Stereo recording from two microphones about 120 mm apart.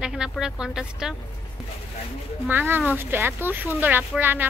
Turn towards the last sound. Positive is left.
turn(degrees=-15)  # may be behind; listen again after turning